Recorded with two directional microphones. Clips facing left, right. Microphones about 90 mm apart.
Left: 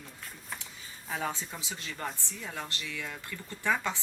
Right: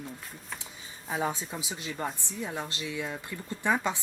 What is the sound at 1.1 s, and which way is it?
Speech, 15° right (ahead or behind).